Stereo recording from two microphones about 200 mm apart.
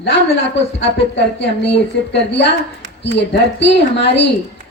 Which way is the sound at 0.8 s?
60° left (ahead or behind).